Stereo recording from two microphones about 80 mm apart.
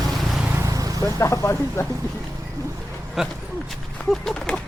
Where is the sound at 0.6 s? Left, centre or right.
Right.